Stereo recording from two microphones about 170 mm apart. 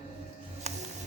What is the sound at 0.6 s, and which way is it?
Music, 40° right (ahead or behind).